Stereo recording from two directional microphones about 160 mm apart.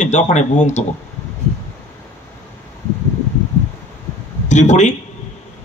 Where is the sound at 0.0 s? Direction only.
50° left (ahead or behind).